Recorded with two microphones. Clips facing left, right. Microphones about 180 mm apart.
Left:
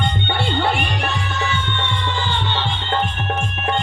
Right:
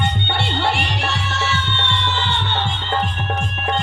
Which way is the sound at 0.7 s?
75° right (ahead or behind).